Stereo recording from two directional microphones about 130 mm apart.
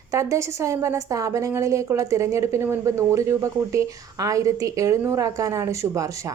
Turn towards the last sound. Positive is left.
turn(degrees=-25)  # may be behind; listen again after turning